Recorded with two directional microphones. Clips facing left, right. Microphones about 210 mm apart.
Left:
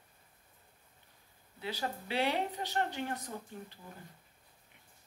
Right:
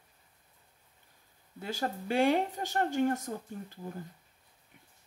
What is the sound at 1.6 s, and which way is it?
A woman's voice, 45° right (ahead or behind).